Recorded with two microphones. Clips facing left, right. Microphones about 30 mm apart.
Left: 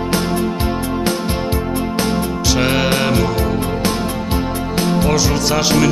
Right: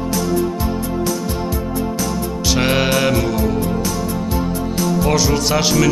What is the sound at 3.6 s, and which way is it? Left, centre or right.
Music, left.